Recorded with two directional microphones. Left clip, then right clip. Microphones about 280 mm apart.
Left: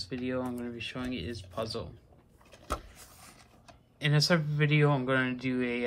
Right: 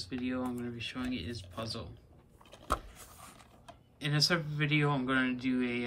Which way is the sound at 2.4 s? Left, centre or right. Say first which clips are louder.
Right 1 dB; right.